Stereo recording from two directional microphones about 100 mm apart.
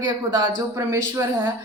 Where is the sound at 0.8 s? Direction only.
25° right (ahead or behind).